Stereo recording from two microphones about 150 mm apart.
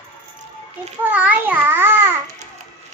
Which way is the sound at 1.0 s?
10° right (ahead or behind).